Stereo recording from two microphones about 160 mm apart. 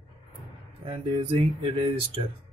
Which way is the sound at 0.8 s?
30° right (ahead or behind).